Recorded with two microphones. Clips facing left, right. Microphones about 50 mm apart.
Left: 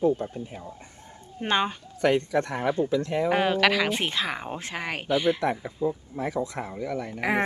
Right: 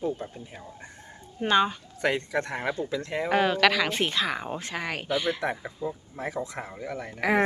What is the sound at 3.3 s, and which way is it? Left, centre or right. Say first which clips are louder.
Speech: right 1 dB; centre.